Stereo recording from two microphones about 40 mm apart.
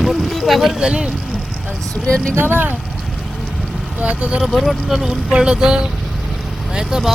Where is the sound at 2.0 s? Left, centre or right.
Left.